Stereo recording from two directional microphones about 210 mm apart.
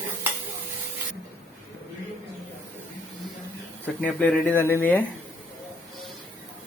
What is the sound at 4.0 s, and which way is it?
Speech, 10° left (ahead or behind).